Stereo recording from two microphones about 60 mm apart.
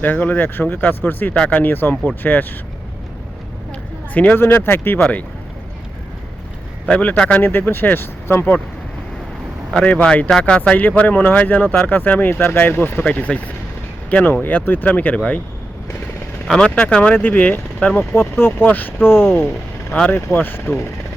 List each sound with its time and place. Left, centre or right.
0.0 s speech: left
4.1 s speech: left
7.2 s speech: left
7.4 s speech: left
9.8 s speech: left
13.0 s speech: left
16.5 s speech: centre
18.1 s speech: left
19.9 s speech: left